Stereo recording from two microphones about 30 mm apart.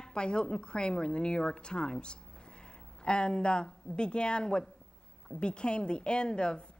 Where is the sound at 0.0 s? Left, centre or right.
Left.